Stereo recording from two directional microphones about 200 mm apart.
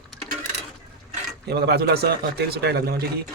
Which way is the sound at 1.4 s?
55° right (ahead or behind).